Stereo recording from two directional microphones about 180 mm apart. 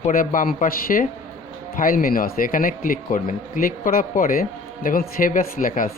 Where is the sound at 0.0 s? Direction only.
50° left (ahead or behind).